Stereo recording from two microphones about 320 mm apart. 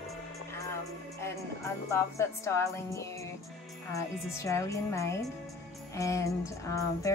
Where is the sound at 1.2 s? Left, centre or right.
Centre.